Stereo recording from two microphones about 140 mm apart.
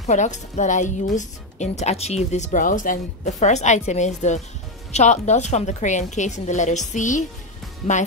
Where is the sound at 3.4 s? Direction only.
55° left (ahead or behind).